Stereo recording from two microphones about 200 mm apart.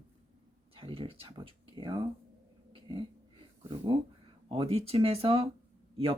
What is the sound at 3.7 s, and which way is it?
Speech, 25° right (ahead or behind).